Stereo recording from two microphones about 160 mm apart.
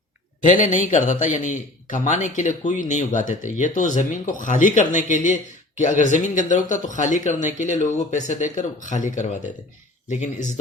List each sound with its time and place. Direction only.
0.4 s a man's voice: 50° left (ahead or behind)